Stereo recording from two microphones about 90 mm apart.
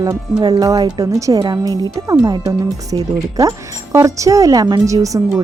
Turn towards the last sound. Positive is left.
turn(degrees=-35)  # may be behind; listen again after turning